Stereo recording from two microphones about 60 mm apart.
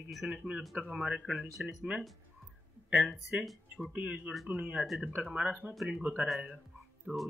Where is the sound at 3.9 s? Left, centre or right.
Right.